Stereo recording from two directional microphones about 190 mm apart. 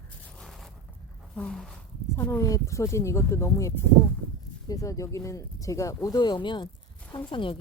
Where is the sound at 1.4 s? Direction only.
5° left (ahead or behind).